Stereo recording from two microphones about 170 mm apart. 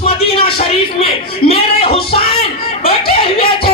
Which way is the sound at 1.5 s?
35° left (ahead or behind).